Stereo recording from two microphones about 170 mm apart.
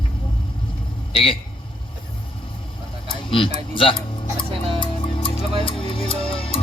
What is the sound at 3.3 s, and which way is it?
Speech, 30° left (ahead or behind).